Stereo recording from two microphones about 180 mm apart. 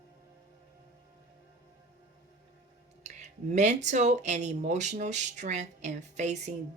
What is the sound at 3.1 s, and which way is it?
Speech, 40° right (ahead or behind).